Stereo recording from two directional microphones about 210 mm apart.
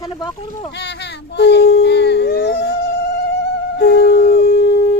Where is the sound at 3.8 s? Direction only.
50° left (ahead or behind).